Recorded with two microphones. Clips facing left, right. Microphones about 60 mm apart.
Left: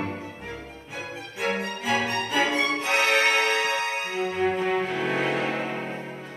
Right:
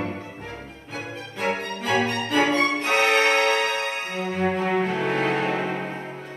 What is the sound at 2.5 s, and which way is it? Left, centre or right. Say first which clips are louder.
Music: right 3 dB; right.